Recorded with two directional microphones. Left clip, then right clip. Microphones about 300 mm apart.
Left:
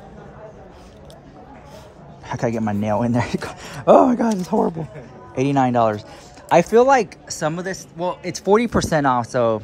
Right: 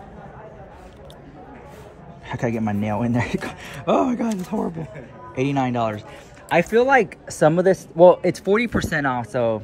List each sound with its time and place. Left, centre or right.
2.2 s a man's voice: centre